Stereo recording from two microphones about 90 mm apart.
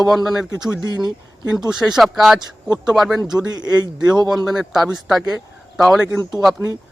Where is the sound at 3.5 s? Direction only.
50° right (ahead or behind).